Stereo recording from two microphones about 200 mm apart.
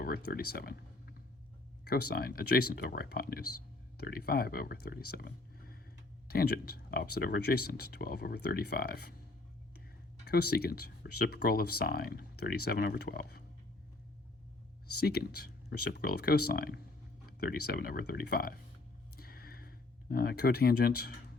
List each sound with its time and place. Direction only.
0.3 s speech: 50° left (ahead or behind)
10.2 s speech: 50° left (ahead or behind)
15.0 s speech: 50° left (ahead or behind)
19.1 s a sound: 50° left (ahead or behind)